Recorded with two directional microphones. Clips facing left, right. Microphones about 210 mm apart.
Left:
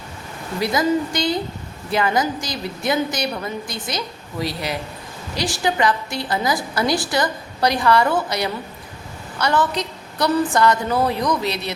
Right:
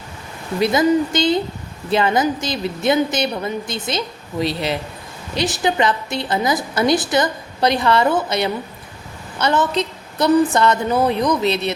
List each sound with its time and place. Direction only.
0.6 s a woman's voice: 25° right (ahead or behind)